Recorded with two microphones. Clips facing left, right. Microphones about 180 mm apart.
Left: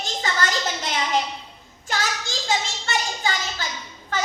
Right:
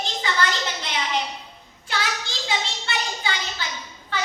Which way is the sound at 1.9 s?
45° left (ahead or behind).